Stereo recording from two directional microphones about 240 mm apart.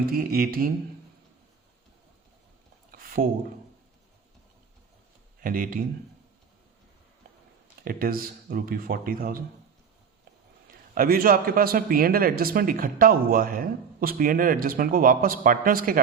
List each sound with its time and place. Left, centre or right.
0.0 s a man's voice: right
2.9 s a sound: right
5.4 s speech: right
7.9 s a man's voice: right
10.9 s a man's voice: right